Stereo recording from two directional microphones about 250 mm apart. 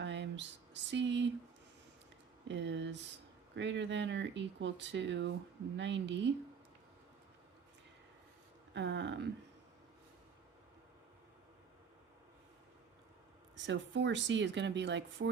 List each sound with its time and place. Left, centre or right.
0.0 s a sound: right
2.5 s speech: right
8.7 s speech: right
13.7 s speech: right